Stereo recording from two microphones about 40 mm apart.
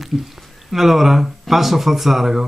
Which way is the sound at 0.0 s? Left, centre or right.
Centre.